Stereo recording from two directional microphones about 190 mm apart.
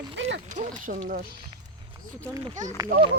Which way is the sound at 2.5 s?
40° right (ahead or behind).